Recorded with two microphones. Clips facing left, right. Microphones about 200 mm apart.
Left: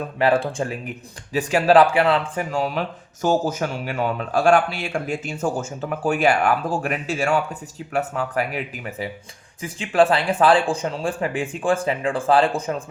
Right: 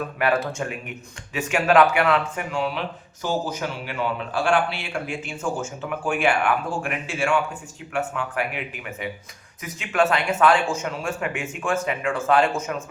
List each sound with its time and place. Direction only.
0.2 s speech: 30° left (ahead or behind)